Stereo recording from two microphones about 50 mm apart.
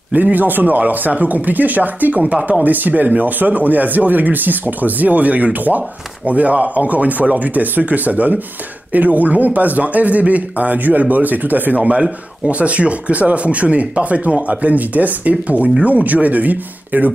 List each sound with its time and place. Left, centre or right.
0.1 s speech: right